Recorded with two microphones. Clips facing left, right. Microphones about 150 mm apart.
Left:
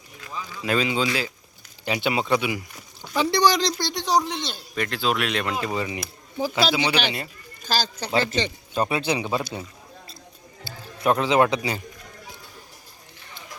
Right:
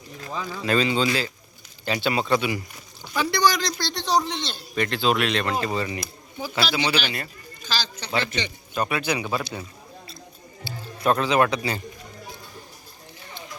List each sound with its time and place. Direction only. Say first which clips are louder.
0.6 s speech: right 1 dB; 10° left (ahead or behind)
3.2 s a sound: left 2 dB; 30° left (ahead or behind)
3.8 s speech: left 1 dB; 15° left (ahead or behind)
6.0 s speech: left 5 dB; 35° left (ahead or behind)
6.5 s a man's voice: left 1 dB; 15° left (ahead or behind)
7.6 s a man's voice: left 4 dB; 45° left (ahead or behind); by 9.4 s 25° left (ahead or behind)
11.0 s a man's voice: left 1 dB; 20° left (ahead or behind)